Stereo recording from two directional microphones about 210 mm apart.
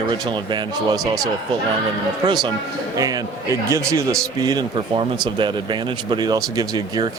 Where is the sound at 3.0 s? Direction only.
15° right (ahead or behind).